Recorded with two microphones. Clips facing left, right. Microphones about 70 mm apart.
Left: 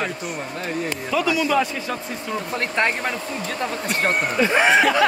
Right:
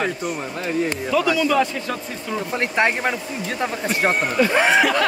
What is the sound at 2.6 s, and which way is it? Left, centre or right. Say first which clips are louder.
A man's voice: right 3 dB; centre.